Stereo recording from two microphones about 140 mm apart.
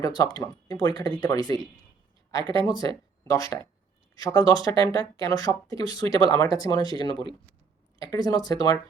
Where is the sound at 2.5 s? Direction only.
30° left (ahead or behind).